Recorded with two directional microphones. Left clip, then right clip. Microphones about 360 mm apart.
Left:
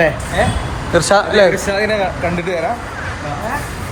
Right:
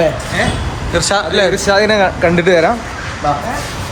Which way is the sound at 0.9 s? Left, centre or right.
Centre.